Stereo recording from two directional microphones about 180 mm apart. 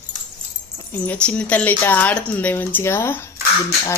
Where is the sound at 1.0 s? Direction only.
5° left (ahead or behind).